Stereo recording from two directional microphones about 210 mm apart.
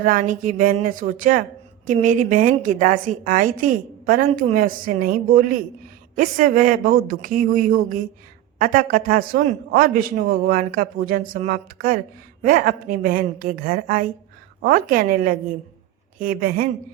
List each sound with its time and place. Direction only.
0.0 s a woman's voice: 40° right (ahead or behind)